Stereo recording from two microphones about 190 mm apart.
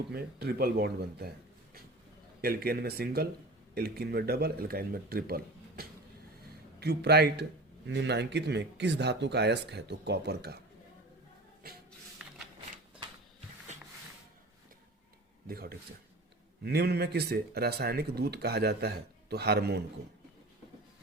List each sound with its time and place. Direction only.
0.1 s speech: 60° right (ahead or behind)
2.4 s speech: 55° right (ahead or behind)
11.9 s a sound: centre (ahead or behind)
15.4 s a man's voice: 55° right (ahead or behind)